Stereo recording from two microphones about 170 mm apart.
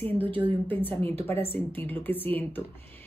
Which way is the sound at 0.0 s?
10° left (ahead or behind).